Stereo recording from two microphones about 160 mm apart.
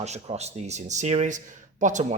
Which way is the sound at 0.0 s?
45° right (ahead or behind).